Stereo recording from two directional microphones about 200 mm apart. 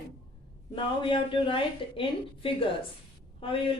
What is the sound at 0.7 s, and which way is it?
A woman's voice, 25° left (ahead or behind).